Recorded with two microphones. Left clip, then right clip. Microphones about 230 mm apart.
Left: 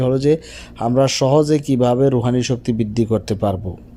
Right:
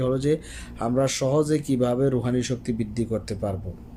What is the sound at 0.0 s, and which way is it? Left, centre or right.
Speech, left.